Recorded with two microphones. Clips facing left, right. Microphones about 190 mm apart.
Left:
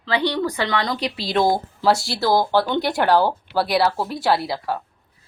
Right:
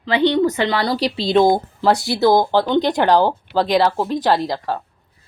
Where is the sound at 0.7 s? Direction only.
35° right (ahead or behind).